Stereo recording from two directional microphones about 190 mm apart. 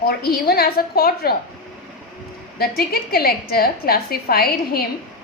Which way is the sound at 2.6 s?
55° left (ahead or behind).